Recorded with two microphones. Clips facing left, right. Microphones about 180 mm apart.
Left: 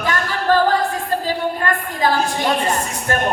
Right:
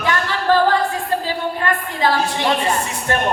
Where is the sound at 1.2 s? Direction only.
45° left (ahead or behind).